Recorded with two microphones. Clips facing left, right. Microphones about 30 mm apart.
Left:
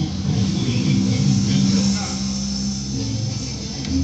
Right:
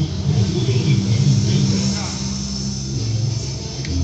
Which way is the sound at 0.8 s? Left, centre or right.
Right.